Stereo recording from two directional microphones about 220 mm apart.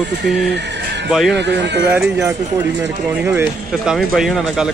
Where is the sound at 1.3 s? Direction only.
50° right (ahead or behind).